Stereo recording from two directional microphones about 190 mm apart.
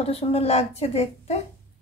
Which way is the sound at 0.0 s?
30° left (ahead or behind).